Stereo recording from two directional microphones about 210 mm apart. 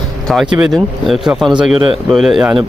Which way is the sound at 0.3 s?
Centre (ahead or behind).